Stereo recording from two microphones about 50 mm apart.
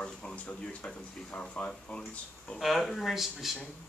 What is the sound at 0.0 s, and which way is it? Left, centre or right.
Speech, centre.